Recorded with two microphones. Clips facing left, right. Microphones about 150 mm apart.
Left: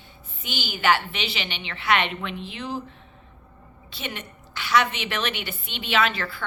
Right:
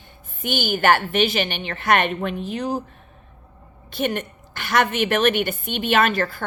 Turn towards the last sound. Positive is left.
turn(degrees=-45)  # may be behind; listen again after turning